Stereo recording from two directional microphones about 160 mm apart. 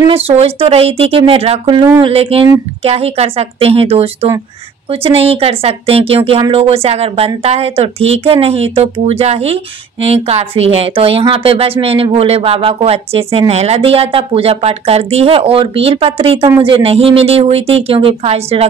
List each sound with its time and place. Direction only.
0.0 s speech: 40° right (ahead or behind)